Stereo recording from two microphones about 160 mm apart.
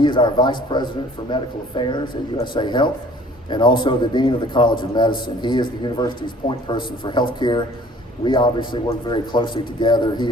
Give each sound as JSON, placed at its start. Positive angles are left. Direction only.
{"t": 0.0, "sound": "a man's voice", "side_deg": 30}